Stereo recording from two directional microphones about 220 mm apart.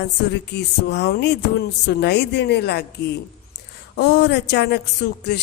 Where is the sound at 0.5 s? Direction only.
50° left (ahead or behind).